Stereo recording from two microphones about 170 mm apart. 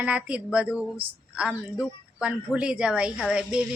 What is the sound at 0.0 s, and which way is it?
A woman's voice, 5° right (ahead or behind).